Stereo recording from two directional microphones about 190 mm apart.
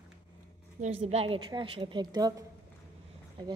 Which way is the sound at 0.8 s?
35° right (ahead or behind).